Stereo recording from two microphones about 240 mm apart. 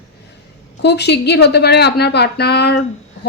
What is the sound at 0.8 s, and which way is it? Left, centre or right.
A woman's voice, left.